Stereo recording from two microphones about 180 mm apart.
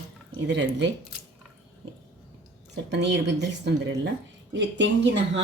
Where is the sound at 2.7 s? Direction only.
75° right (ahead or behind).